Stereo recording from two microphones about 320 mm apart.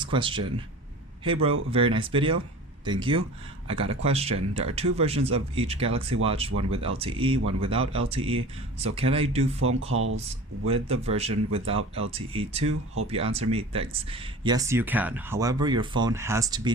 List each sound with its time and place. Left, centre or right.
0.0 s speech: centre
9.9 s speech: right
10.7 s speech: centre